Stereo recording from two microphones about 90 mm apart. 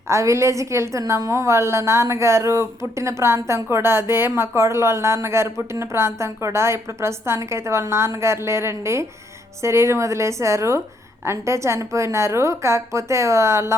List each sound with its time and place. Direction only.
0.1 s a woman's voice: 35° right (ahead or behind)